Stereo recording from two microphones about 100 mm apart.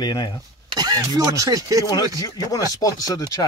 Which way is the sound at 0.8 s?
40° right (ahead or behind).